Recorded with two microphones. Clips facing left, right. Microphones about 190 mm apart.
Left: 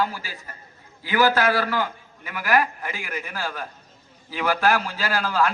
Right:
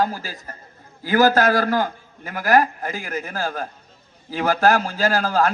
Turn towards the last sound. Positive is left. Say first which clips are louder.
# right 4 dB
turn(degrees=-45)  # may be behind; listen again after turning